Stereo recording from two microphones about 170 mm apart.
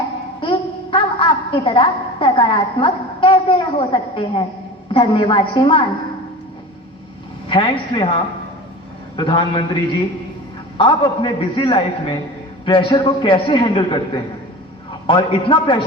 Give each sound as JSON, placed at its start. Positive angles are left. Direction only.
{"t": 0.3, "sound": "a woman's voice", "side_deg": 30}
{"t": 7.4, "sound": "a man's voice", "side_deg": 30}
{"t": 10.8, "sound": "a man's voice", "side_deg": 30}
{"t": 15.0, "sound": "a man's voice", "side_deg": 30}